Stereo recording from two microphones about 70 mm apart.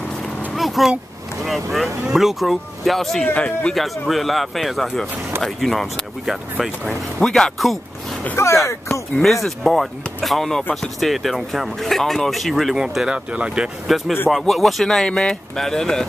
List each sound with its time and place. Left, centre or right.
0.6 s speech: centre
3.3 s speech: centre
3.7 s speech: centre
8.6 s speech: left
9.2 s speech: centre
13.8 s speech: centre